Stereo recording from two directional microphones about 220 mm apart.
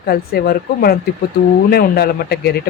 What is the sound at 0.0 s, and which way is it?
Speech, 45° left (ahead or behind).